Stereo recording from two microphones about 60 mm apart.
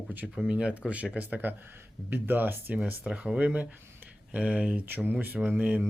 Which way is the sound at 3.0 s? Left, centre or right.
Centre.